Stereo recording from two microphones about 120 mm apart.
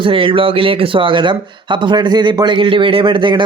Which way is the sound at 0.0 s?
45° right (ahead or behind).